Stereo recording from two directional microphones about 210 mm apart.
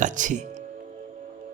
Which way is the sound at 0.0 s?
35° right (ahead or behind).